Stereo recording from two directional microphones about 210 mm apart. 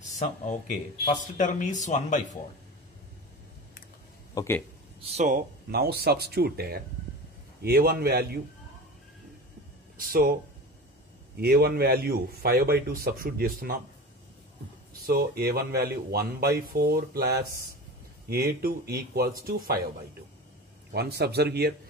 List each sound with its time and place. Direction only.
1.2 s speech: 35° left (ahead or behind)
4.4 s speech: 10° left (ahead or behind)
5.0 s a man's voice: 35° right (ahead or behind); by 8.4 s 50° right (ahead or behind)
9.9 s speech: 45° right (ahead or behind)
11.3 s a man's voice: 50° right (ahead or behind)
15.0 s a man's voice: 45° right (ahead or behind)
20.9 s a man's voice: 50° right (ahead or behind)